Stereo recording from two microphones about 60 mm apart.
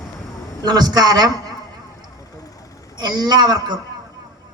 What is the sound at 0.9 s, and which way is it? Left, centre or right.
Speech, right.